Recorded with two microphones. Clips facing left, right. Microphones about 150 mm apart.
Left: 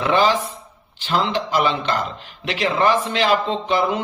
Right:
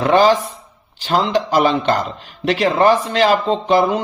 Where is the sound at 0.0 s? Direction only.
40° right (ahead or behind).